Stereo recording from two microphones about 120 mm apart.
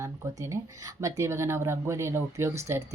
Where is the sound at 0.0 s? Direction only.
25° right (ahead or behind).